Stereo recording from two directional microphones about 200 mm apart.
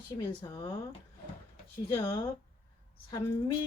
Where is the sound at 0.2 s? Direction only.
20° left (ahead or behind).